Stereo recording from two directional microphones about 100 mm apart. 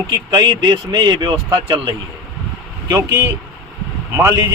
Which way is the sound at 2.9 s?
35° right (ahead or behind).